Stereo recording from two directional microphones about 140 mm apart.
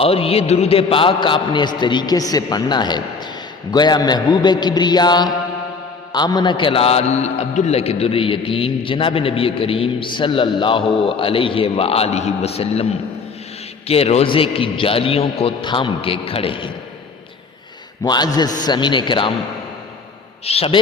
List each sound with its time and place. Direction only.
0.0 s a man's voice: 45° left (ahead or behind)
18.0 s a man's voice: 30° left (ahead or behind)
20.4 s a man's voice: 45° left (ahead or behind)